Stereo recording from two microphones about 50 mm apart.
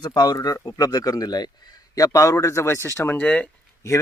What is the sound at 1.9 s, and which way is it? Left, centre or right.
Speech, left.